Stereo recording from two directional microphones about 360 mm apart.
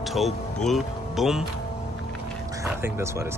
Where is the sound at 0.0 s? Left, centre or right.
Centre.